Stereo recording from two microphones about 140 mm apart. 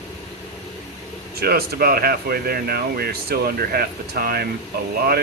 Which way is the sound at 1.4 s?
90° right.